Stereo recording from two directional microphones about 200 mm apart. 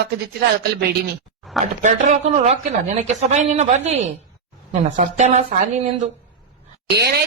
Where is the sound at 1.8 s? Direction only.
35° right (ahead or behind).